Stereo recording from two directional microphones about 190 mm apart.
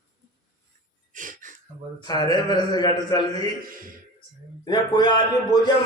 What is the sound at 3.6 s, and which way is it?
Speech, 50° right (ahead or behind).